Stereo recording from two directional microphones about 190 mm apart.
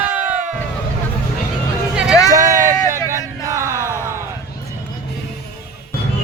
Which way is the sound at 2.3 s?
15° right (ahead or behind).